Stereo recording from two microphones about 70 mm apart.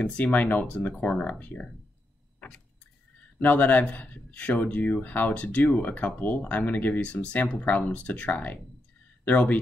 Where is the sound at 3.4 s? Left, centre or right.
Left.